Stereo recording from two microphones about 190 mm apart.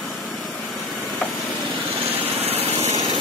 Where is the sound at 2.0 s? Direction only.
30° right (ahead or behind).